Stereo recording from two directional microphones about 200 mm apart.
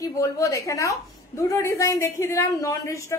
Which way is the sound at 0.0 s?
15° left (ahead or behind).